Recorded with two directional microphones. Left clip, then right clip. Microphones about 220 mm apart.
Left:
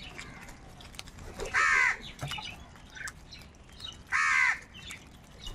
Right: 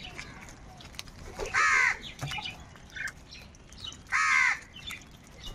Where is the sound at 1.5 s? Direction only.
10° left (ahead or behind).